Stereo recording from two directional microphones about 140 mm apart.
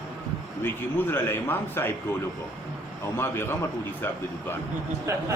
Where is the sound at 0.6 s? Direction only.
15° left (ahead or behind).